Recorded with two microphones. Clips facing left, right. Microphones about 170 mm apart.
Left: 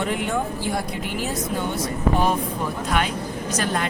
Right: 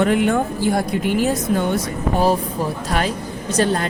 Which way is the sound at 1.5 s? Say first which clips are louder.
Right 6 dB; 60° right (ahead or behind).